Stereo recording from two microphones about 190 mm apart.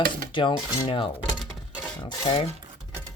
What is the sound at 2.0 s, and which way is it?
Speech, 25° left (ahead or behind).